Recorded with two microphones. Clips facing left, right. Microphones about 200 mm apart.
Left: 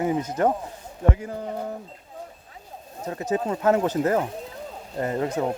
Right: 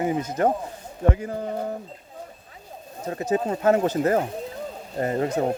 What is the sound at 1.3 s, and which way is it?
Mantra, 45° right (ahead or behind).